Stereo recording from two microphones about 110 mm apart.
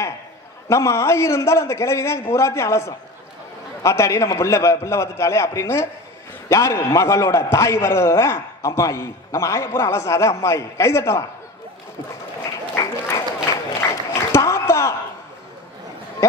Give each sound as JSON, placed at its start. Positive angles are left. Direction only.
{"t": 0.7, "sound": "a man's voice", "side_deg": 25}
{"t": 12.4, "sound": "applause", "side_deg": 30}